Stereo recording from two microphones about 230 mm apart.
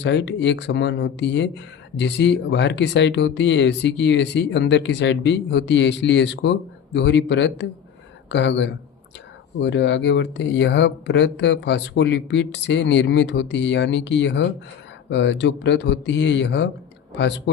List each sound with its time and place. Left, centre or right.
0.0 s speech: left